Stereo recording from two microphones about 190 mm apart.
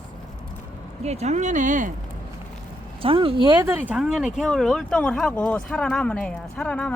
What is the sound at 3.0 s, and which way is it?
Speech, 30° right (ahead or behind).